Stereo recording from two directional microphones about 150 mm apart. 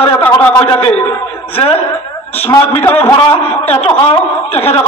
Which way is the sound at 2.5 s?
15° left (ahead or behind).